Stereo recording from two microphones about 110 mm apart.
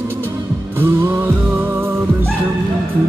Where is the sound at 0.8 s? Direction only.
20° right (ahead or behind).